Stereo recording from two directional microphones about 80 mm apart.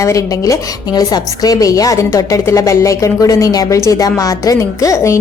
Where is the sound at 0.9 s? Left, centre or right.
Left.